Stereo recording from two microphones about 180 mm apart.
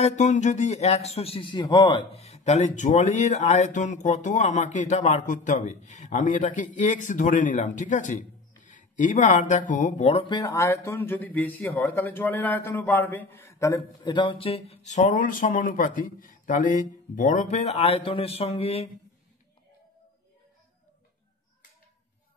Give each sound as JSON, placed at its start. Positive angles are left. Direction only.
{"t": 0.0, "sound": "a man's voice", "side_deg": 40}